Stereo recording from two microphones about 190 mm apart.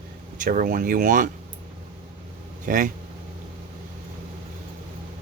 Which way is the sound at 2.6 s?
45° right (ahead or behind).